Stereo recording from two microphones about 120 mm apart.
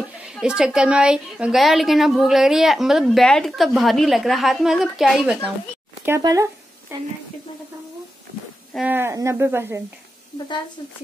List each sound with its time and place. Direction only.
0.3 s a woman's voice: 5° right (ahead or behind)
6.0 s speech: 25° right (ahead or behind)
8.8 s speech: 20° right (ahead or behind)